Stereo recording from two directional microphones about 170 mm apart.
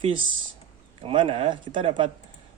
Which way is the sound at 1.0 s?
30° right (ahead or behind).